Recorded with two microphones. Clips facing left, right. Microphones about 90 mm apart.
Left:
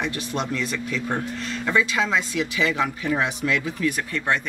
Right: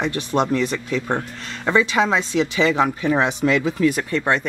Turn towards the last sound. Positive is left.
turn(degrees=-30)  # may be behind; listen again after turning